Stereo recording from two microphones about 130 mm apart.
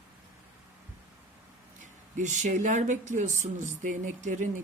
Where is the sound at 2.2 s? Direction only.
70° right (ahead or behind).